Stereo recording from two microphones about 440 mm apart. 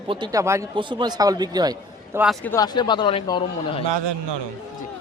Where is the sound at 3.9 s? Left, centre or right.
Right.